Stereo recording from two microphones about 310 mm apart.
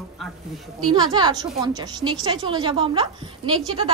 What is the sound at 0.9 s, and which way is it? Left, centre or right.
A woman's voice, centre.